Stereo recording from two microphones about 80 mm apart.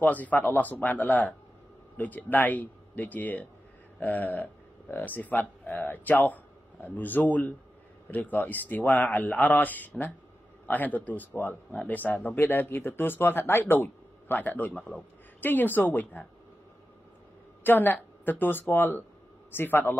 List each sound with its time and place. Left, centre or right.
0.0 s speech: left
17.6 s speech: left